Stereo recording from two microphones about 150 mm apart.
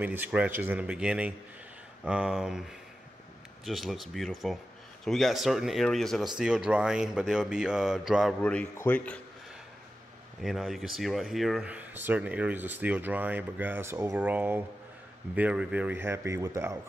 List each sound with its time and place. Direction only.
0.0 s speech: 10° right (ahead or behind)
8.4 s speech: 10° left (ahead or behind)
10.4 s speech: centre (ahead or behind); by 16.8 s 20° right (ahead or behind)